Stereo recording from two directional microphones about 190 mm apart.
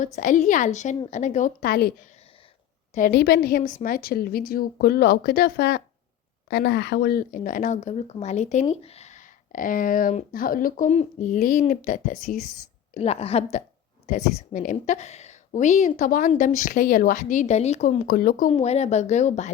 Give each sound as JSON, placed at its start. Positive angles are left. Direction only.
{"t": 0.0, "sound": "a woman's voice", "side_deg": 40}
{"t": 3.1, "sound": "a woman's voice", "side_deg": 60}
{"t": 12.9, "sound": "a woman's voice", "side_deg": 35}
{"t": 18.5, "sound": "a woman's voice", "side_deg": 35}